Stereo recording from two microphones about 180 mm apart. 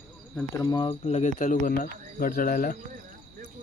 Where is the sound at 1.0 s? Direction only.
40° left (ahead or behind).